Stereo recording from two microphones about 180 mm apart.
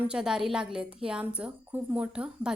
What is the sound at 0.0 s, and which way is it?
Speech, 5° right (ahead or behind).